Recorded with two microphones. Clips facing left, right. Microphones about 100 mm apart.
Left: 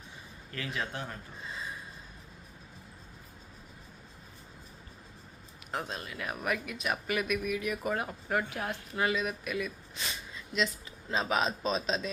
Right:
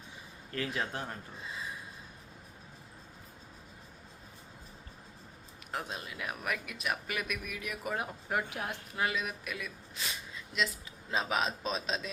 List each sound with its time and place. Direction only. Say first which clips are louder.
0.5 s speech: right 1 dB; 35° right (ahead or behind)
5.9 s speech: left 2 dB; 10° right (ahead or behind)
8.0 s a woman's voice: left 2 dB; 15° right (ahead or behind)
9.0 s speech: left 3 dB; centre (ahead or behind)